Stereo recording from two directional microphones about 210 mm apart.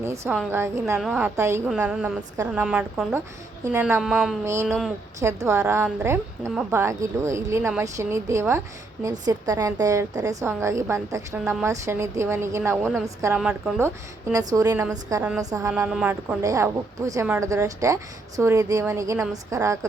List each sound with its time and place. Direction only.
0.0 s a woman's voice: 15° right (ahead or behind)
4.4 s a woman's voice: 15° right (ahead or behind)
12.7 s a woman's voice: centre (ahead or behind); by 15.7 s 15° right (ahead or behind)
15.7 s a woman's voice: 5° right (ahead or behind)
16.4 s a woman's voice: 15° right (ahead or behind)